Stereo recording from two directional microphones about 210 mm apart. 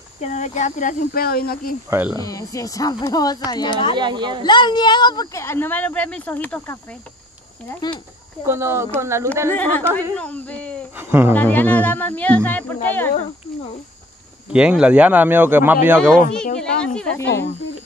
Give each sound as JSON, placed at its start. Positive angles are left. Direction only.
{"t": 0.2, "sound": "speech", "side_deg": 35}
{"t": 1.9, "sound": "speech", "side_deg": -10}
{"t": 2.1, "sound": "speech", "side_deg": 15}
{"t": 3.9, "sound": "speech", "side_deg": -20}
{"t": 4.5, "sound": "speech", "side_deg": 20}
{"t": 8.5, "sound": "speech", "side_deg": -10}
{"t": 9.5, "sound": "speech", "side_deg": 10}
{"t": 11.0, "sound": "speech", "side_deg": -10}
{"t": 11.3, "sound": "speech", "side_deg": 10}
{"t": 14.5, "sound": "speech", "side_deg": -5}
{"t": 16.5, "sound": "a sound", "side_deg": 5}